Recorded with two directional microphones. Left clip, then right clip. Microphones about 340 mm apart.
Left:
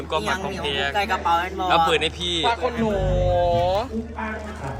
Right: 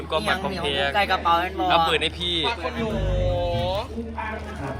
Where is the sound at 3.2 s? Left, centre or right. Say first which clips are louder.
Left 6 dB; left.